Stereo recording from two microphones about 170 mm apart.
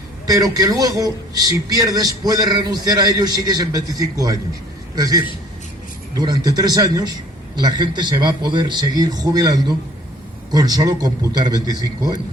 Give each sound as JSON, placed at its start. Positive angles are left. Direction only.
{"t": 0.3, "sound": "a man's voice", "side_deg": -20}